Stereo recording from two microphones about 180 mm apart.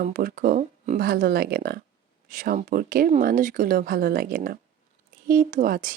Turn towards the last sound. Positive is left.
turn(degrees=-50)  # may be behind; listen again after turning